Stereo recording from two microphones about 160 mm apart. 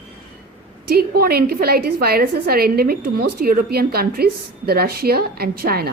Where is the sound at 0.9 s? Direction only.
80° right.